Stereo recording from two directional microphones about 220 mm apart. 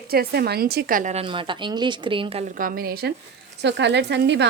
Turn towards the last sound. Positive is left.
turn(degrees=-50)  # may be behind; listen again after turning